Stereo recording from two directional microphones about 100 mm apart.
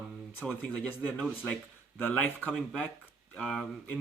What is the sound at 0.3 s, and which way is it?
Speech, 10° left (ahead or behind).